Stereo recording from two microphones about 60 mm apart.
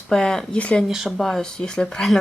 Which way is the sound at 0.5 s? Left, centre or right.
Left.